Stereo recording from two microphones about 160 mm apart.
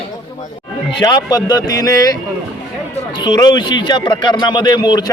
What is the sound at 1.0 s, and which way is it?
Speech, 25° left (ahead or behind).